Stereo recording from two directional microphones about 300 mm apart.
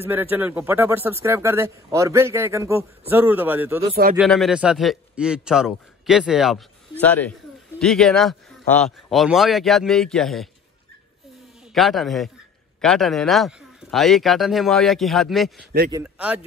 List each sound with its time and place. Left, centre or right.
0.0 s speech: centre
3.9 s speech: right
4.2 s a man's voice: centre
11.7 s a man's voice: centre